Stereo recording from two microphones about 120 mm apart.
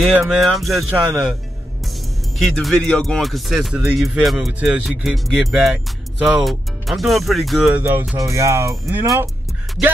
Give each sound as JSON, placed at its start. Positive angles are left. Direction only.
{"t": 0.2, "sound": "speech", "side_deg": 0}
{"t": 2.3, "sound": "speech", "side_deg": 0}
{"t": 4.6, "sound": "speech", "side_deg": -10}
{"t": 4.8, "sound": "speech", "side_deg": 0}
{"t": 7.7, "sound": "speech", "side_deg": -15}
{"t": 8.2, "sound": "speech", "side_deg": -25}